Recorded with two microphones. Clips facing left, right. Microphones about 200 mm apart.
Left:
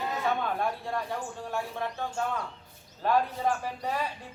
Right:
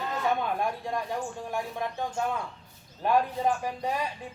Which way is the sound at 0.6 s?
15° right (ahead or behind).